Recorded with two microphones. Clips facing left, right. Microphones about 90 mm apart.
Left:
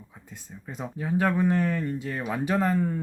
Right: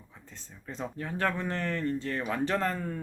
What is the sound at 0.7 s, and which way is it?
Speech, 10° left (ahead or behind).